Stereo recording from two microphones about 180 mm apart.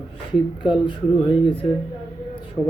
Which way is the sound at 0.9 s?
30° left (ahead or behind).